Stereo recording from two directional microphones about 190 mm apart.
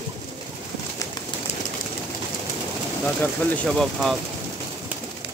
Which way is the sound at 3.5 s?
5° left (ahead or behind).